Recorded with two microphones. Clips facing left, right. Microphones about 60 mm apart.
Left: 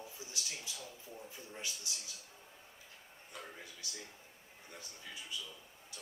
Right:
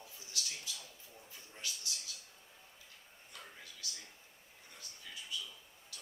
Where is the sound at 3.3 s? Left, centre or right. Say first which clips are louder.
Left 4 dB; centre.